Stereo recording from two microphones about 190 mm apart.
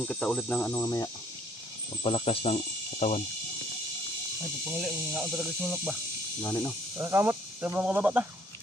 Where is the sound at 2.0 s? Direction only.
30° left (ahead or behind).